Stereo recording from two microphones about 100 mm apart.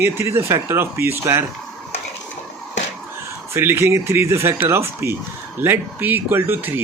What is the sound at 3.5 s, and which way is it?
Speech, 25° right (ahead or behind).